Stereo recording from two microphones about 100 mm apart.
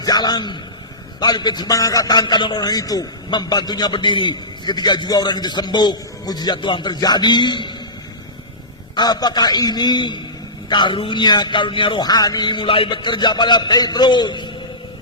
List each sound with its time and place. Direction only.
0.0 s a man's voice: 45° left (ahead or behind)
9.0 s a man's voice: 45° left (ahead or behind)
12.0 s a man's voice: 40° left (ahead or behind)